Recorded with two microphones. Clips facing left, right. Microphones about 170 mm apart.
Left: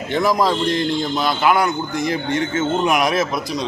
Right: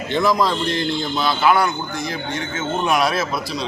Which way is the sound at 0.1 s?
10° left (ahead or behind).